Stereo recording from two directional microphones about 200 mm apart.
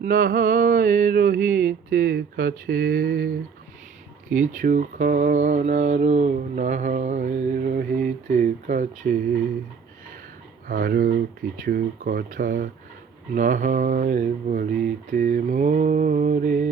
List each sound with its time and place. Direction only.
0.0 s mantra: 45° right (ahead or behind)
4.3 s speech: 40° right (ahead or behind)
10.7 s mantra: 45° right (ahead or behind)
13.3 s speech: 40° right (ahead or behind)